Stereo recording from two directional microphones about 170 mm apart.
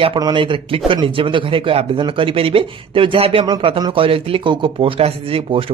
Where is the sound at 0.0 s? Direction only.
30° right (ahead or behind).